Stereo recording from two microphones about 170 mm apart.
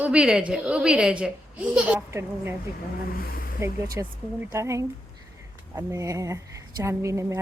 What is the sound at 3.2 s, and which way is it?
Speech, 60° left (ahead or behind).